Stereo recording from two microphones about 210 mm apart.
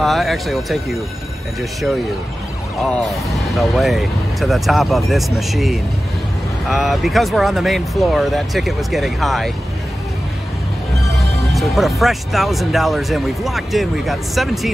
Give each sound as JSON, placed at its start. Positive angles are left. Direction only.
{"t": 0.0, "sound": "speech", "side_deg": 0}
{"t": 3.5, "sound": "speech", "side_deg": 0}
{"t": 11.5, "sound": "speech", "side_deg": 0}